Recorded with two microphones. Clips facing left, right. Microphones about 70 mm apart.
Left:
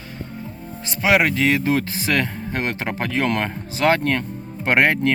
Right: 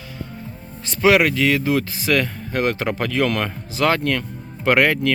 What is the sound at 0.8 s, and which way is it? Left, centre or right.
Speech, left.